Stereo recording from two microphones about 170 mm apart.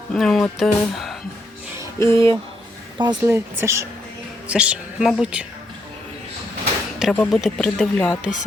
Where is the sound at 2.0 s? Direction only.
15° left (ahead or behind).